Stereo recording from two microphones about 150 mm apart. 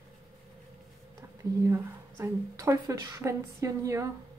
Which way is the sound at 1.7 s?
20° right (ahead or behind).